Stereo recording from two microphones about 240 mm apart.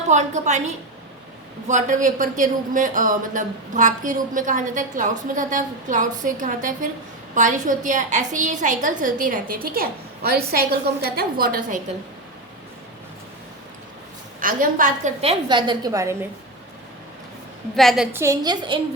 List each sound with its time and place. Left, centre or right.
0.1 s a woman's voice: right
14.3 s a woman's voice: right; by 16.1 s centre
17.7 s a woman's voice: centre